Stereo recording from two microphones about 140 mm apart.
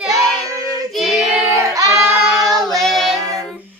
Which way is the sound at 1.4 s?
20° right (ahead or behind).